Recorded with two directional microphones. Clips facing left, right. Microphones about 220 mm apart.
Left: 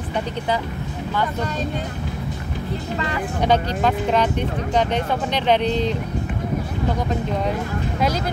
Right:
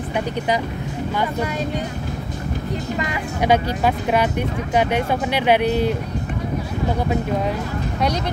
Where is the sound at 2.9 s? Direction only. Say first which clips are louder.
Even; 15° right (ahead or behind).